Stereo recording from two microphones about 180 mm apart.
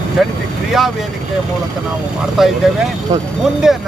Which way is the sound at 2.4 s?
Centre (ahead or behind).